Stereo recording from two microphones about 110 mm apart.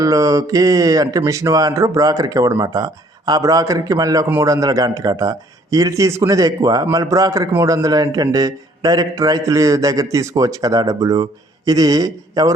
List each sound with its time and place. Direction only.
0.0 s a man's voice: 30° right (ahead or behind)